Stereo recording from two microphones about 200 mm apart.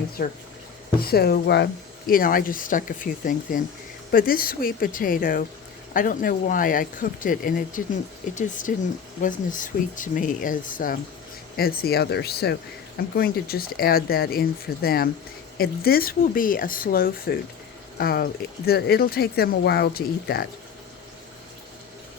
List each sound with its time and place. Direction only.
0.2 s speech: 45° left (ahead or behind)